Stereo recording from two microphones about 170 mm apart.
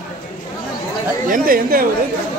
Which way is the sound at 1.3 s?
55° right (ahead or behind).